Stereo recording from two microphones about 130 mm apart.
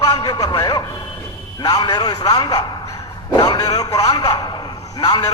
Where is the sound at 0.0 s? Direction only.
30° left (ahead or behind).